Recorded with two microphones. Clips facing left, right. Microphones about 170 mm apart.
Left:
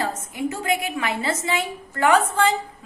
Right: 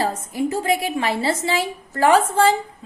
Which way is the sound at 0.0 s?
35° right (ahead or behind).